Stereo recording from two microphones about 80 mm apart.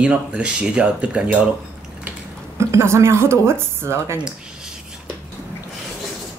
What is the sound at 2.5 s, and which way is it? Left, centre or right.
A woman's voice, right.